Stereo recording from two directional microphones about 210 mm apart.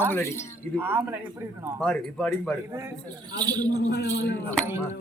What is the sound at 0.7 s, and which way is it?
Jingle bell, 10° right (ahead or behind).